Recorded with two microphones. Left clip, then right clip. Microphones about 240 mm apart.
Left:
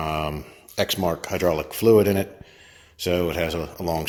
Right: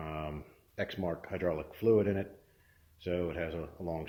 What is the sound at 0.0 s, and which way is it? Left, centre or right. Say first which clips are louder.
A man's voice: left 14 dB; left.